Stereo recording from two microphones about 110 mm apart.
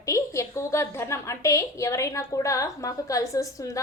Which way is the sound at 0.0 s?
30° left (ahead or behind).